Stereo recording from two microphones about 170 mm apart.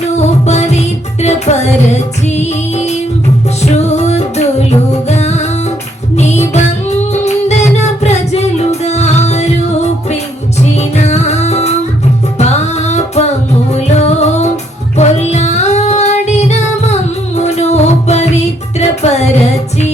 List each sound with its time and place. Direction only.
0.2 s music: 40° left (ahead or behind)